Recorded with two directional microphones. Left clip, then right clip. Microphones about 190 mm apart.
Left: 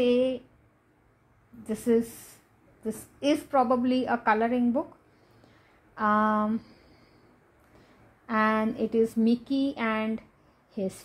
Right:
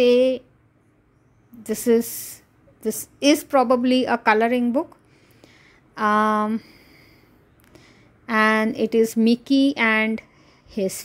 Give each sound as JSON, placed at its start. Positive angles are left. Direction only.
{"t": 0.0, "sound": "speech", "side_deg": -50}
{"t": 1.6, "sound": "a woman's voice", "side_deg": -50}
{"t": 5.9, "sound": "a woman's voice", "side_deg": -45}
{"t": 8.3, "sound": "a woman's voice", "side_deg": -50}